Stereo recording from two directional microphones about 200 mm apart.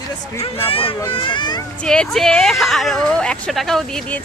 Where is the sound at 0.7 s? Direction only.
25° left (ahead or behind).